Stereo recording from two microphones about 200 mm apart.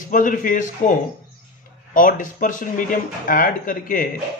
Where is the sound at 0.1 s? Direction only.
40° left (ahead or behind).